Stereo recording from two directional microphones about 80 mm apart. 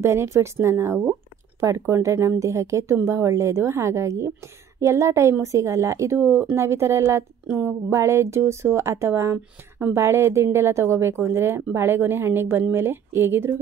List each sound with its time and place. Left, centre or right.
0.0 s speech: right
6.1 s a woman's voice: right